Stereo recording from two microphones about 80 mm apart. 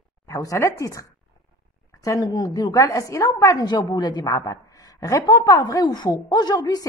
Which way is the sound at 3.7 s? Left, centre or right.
Left.